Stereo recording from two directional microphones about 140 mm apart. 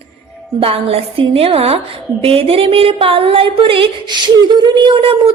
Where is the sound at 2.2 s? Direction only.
45° right (ahead or behind).